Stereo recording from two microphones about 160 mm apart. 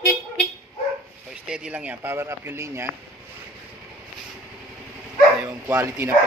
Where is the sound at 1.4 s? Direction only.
5° right (ahead or behind).